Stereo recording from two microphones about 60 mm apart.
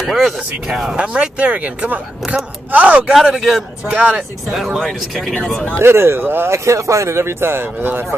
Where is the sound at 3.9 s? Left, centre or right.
Right.